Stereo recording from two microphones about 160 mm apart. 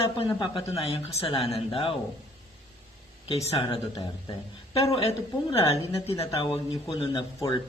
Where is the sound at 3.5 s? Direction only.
30° left (ahead or behind).